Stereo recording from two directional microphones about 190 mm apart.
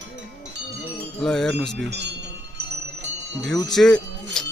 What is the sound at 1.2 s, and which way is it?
Speech, 5° left (ahead or behind).